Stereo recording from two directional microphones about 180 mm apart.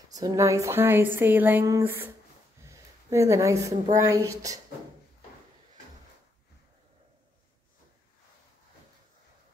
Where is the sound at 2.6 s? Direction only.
15° right (ahead or behind).